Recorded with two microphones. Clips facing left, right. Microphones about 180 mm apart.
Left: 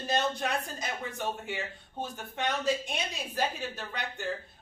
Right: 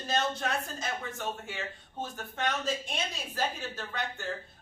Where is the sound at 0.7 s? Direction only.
15° left (ahead or behind).